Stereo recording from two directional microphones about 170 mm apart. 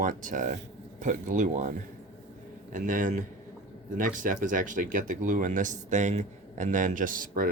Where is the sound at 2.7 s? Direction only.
50° right (ahead or behind).